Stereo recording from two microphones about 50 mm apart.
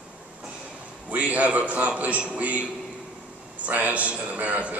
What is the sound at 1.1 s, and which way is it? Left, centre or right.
A man's voice, right.